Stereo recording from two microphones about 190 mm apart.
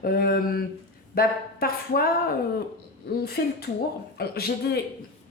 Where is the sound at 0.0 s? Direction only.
50° left (ahead or behind).